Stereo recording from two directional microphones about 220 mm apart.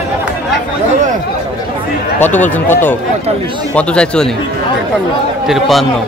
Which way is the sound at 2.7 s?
10° left (ahead or behind).